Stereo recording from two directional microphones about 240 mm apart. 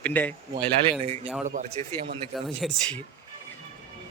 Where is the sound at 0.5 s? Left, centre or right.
Right.